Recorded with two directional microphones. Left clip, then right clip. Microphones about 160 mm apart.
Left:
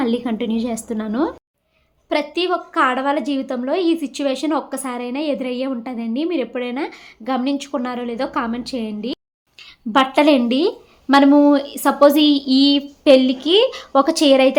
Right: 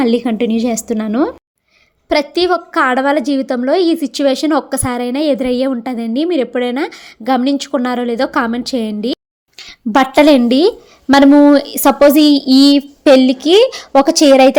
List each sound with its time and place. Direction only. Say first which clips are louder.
0.0 s a woman's voice: right 7 dB; 40° right (ahead or behind)